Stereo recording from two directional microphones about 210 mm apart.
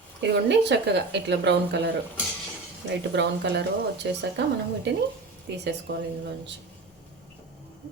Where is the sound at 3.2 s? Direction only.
55° right (ahead or behind).